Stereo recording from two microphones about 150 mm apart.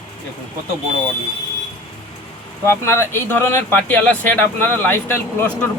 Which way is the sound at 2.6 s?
15° left (ahead or behind).